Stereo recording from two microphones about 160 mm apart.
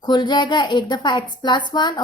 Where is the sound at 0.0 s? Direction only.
30° left (ahead or behind).